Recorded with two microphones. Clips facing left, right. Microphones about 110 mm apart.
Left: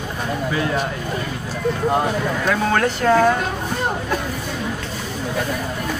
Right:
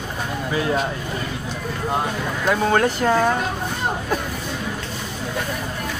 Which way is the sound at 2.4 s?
20° right (ahead or behind).